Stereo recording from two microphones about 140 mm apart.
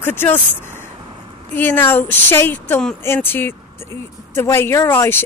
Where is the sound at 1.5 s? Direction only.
15° left (ahead or behind).